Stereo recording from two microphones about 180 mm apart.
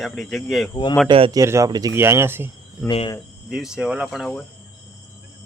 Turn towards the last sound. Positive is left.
turn(degrees=0)  # may be behind; listen again after turning